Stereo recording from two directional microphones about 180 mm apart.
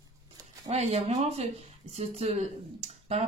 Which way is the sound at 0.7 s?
40° right (ahead or behind).